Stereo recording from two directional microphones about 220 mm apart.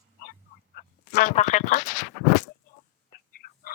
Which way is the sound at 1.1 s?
35° left (ahead or behind).